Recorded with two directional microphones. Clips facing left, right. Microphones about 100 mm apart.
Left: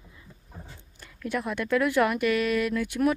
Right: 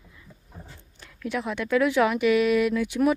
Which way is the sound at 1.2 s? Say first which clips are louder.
Right 1 dB; centre (ahead or behind).